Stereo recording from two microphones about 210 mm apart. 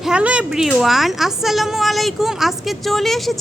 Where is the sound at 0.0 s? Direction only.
5° right (ahead or behind).